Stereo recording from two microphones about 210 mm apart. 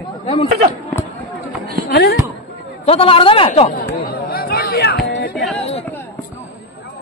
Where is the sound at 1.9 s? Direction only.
50° left (ahead or behind).